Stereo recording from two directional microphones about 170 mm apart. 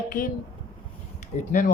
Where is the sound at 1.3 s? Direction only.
50° left (ahead or behind).